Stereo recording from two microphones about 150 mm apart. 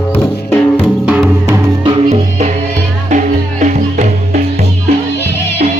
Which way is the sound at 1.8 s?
40° right (ahead or behind).